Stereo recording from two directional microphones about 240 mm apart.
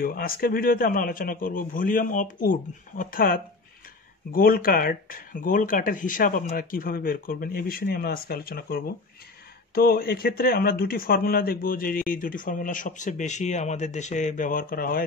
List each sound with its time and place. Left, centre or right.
0.0 s speech: left